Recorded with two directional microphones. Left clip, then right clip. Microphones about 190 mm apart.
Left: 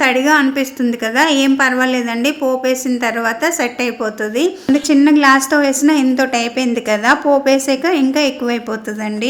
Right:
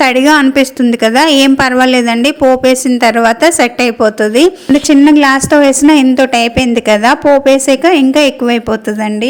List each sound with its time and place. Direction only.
0.0 s a woman's voice: 45° right (ahead or behind)